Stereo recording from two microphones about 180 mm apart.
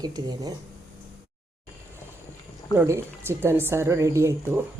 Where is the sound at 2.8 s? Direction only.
15° right (ahead or behind).